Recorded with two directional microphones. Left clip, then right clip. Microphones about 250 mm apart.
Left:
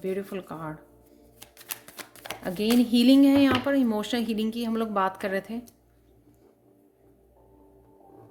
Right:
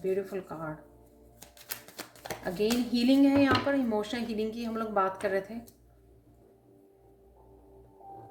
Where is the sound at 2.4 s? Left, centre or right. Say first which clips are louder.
Left 4 dB; left.